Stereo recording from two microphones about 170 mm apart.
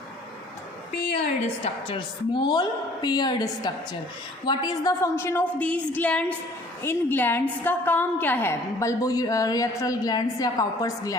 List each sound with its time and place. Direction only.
1.6 s a woman's voice: 30° left (ahead or behind)